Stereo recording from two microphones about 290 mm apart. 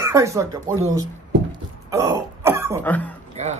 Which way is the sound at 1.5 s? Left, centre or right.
Centre.